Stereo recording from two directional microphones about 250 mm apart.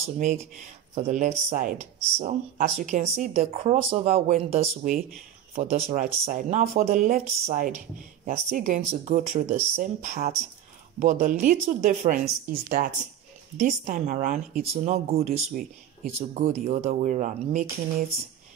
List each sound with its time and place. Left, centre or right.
0.0 s a woman's voice: right